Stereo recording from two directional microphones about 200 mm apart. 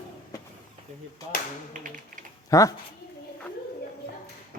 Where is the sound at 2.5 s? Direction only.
15° left (ahead or behind).